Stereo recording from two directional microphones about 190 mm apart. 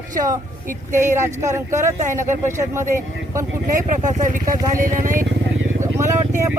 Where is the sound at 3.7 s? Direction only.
40° right (ahead or behind).